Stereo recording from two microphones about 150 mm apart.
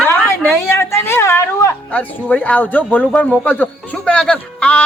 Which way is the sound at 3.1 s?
10° left (ahead or behind).